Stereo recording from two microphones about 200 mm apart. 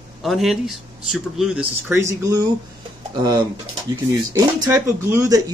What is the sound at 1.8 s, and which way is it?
Speech, 10° right (ahead or behind).